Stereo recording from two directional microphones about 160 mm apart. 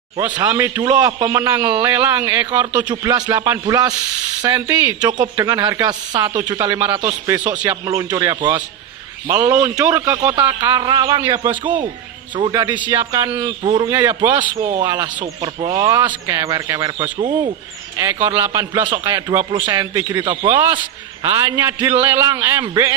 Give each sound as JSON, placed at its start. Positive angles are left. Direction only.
{"t": 0.4, "sound": "a man's voice", "side_deg": -25}
{"t": 2.9, "sound": "a man's voice", "side_deg": -25}
{"t": 7.1, "sound": "a man's voice", "side_deg": -10}
{"t": 7.6, "sound": "a man's voice", "side_deg": -25}
{"t": 12.7, "sound": "a man's voice", "side_deg": -10}
{"t": 13.3, "sound": "a man's voice", "side_deg": -30}
{"t": 13.8, "sound": "a man's voice", "side_deg": -15}
{"t": 14.8, "sound": "a man's voice", "side_deg": -25}
{"t": 17.9, "sound": "a man's voice", "side_deg": -15}